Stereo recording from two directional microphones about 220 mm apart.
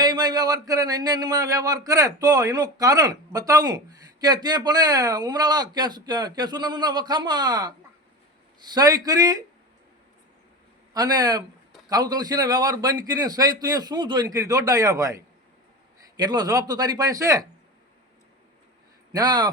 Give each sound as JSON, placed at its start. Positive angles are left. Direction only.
{"t": 0.0, "sound": "speech", "side_deg": -20}
{"t": 10.9, "sound": "speech", "side_deg": -20}
{"t": 19.1, "sound": "speech", "side_deg": -15}